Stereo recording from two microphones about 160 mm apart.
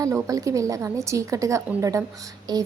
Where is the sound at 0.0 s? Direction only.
20° right (ahead or behind).